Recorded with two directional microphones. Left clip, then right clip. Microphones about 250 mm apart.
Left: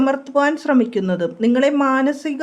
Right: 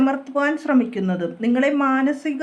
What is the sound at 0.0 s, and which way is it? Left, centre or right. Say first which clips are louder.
Speech: left 3 dB; left.